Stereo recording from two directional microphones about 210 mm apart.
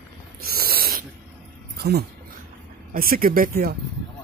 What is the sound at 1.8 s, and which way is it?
Speech, 50° right (ahead or behind).